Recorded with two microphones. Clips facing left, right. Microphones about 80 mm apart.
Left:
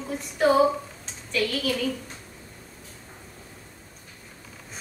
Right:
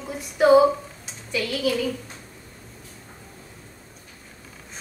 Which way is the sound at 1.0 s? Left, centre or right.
Centre.